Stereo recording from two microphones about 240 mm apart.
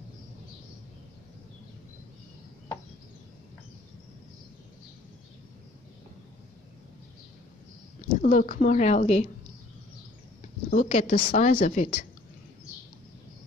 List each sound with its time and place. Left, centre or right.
8.1 s a woman's voice: left
10.7 s a woman's voice: left